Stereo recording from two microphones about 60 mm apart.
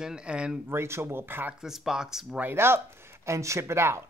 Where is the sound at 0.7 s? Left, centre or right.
Right.